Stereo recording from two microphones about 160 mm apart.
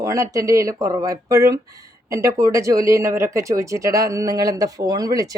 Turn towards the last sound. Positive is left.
turn(degrees=-20)  # may be behind; listen again after turning